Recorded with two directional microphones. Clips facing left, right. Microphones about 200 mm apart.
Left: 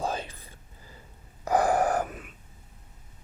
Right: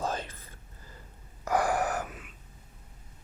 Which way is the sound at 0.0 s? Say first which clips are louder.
Left 2 dB; 10° left (ahead or behind).